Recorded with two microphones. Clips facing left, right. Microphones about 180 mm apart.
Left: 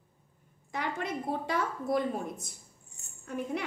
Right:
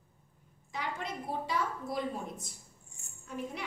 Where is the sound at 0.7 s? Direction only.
55° left (ahead or behind).